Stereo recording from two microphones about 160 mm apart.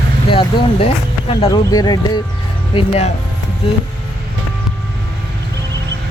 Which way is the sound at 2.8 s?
40° left (ahead or behind).